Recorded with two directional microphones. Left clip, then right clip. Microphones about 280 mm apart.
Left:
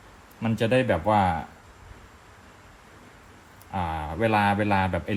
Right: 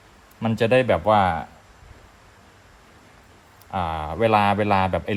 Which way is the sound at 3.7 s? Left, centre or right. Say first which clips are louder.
Right 4 dB; right.